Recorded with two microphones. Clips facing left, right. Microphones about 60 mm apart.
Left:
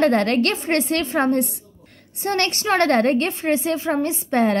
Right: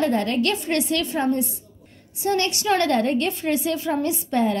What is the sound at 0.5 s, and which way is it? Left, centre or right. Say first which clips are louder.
Speech: left 2 dB; left.